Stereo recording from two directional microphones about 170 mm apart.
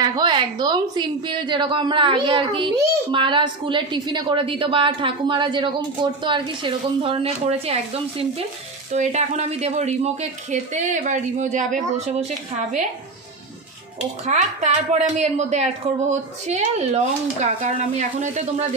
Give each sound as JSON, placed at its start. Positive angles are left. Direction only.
{"t": 0.0, "sound": "a woman's voice", "side_deg": -25}
{"t": 14.2, "sound": "a woman's voice", "side_deg": -45}